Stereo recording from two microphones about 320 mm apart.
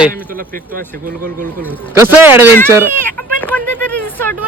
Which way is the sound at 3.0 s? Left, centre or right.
Centre.